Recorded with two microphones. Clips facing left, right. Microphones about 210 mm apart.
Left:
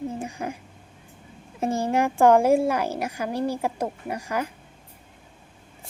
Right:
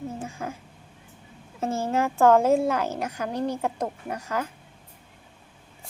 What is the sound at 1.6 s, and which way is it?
A woman's voice, 15° left (ahead or behind).